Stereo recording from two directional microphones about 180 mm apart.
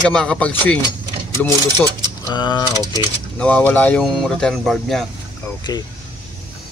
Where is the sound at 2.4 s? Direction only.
25° left (ahead or behind).